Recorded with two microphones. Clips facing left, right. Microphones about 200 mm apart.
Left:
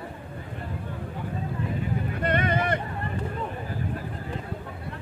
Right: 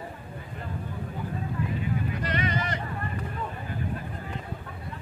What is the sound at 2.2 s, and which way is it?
Boat, 55° left (ahead or behind).